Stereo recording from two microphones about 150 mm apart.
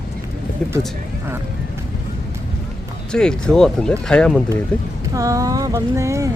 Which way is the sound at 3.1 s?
5° left (ahead or behind).